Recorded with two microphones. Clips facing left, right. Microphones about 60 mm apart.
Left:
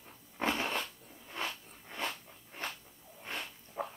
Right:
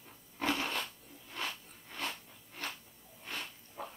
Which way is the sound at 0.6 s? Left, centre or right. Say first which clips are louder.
Left 2 dB; centre.